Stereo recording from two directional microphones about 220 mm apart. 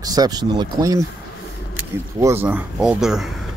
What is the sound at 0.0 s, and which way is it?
Speech, 15° right (ahead or behind).